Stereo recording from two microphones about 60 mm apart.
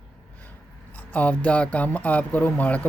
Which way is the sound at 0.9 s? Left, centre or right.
Left.